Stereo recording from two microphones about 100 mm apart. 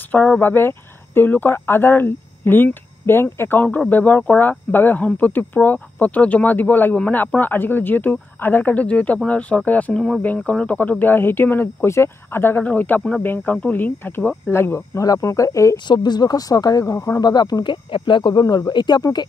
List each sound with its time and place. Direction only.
0.1 s speech: 15° left (ahead or behind)
3.6 s speech: 10° left (ahead or behind); by 15.8 s 30° left (ahead or behind)
15.9 s speech: 45° left (ahead or behind)
17.9 s speech: 55° left (ahead or behind)